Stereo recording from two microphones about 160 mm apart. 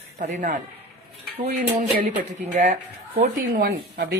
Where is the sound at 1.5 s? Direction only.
70° right (ahead or behind).